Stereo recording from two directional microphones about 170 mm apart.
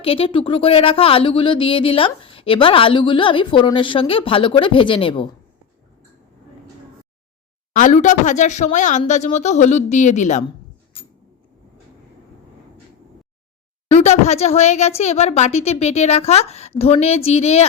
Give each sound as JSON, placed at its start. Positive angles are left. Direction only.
{"t": 0.0, "sound": "speech", "side_deg": 35}
{"t": 7.7, "sound": "speech", "side_deg": 45}
{"t": 13.9, "sound": "speech", "side_deg": 40}